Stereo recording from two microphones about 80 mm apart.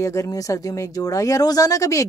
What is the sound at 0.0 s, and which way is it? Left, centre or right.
Speech, left.